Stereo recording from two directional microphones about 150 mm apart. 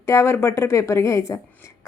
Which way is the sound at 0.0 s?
20° left (ahead or behind).